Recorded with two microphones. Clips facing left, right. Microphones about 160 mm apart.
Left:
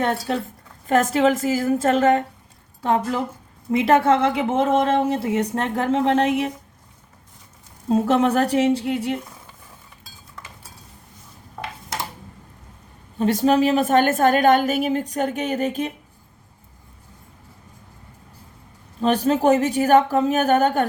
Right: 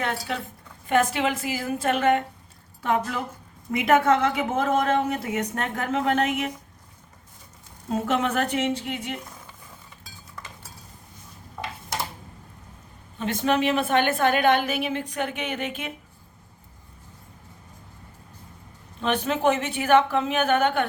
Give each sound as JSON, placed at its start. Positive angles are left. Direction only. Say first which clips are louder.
{"t": 0.0, "sound": "a woman's voice", "louder": "left 6 dB", "side_deg": 40}
{"t": 7.9, "sound": "a woman's voice", "louder": "left 7 dB", "side_deg": 35}
{"t": 13.1, "sound": "a woman's voice", "louder": "left 6 dB", "side_deg": 35}
{"t": 19.0, "sound": "a woman's voice", "louder": "left 5 dB", "side_deg": 35}